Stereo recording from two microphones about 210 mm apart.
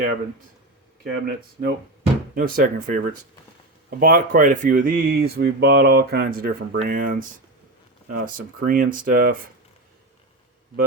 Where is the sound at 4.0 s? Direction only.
40° right (ahead or behind).